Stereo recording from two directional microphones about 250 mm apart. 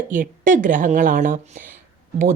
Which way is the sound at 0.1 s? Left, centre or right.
Right.